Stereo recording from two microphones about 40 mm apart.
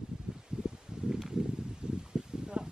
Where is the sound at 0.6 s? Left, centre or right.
Centre.